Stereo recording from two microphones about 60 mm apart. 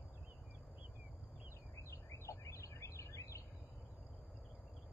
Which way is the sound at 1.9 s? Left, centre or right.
Left.